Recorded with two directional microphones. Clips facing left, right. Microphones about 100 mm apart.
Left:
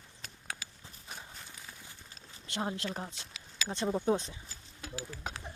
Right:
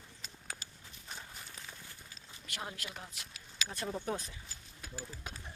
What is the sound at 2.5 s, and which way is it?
Speech, 30° left (ahead or behind).